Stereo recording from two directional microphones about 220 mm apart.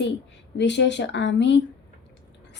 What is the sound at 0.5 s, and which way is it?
A woman's voice, 55° left (ahead or behind).